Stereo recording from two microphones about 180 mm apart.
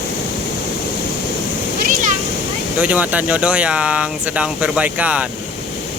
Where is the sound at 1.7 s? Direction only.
50° right (ahead or behind).